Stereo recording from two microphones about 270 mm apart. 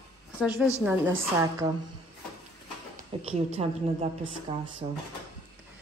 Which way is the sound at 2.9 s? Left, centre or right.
Right.